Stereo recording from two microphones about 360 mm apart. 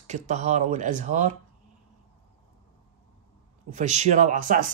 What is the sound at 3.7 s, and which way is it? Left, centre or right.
A woman's voice, centre.